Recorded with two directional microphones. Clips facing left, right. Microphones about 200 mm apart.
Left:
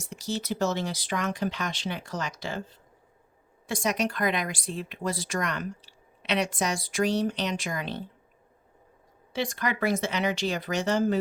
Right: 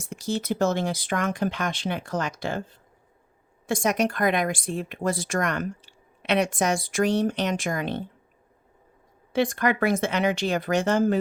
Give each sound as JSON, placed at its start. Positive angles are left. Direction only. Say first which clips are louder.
{"t": 0.0, "sound": "speech", "louder": "right 4 dB", "side_deg": -55}
{"t": 9.3, "sound": "speech", "louder": "right 7 dB", "side_deg": -55}